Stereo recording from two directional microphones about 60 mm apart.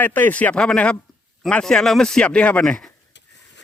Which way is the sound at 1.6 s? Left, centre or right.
Centre.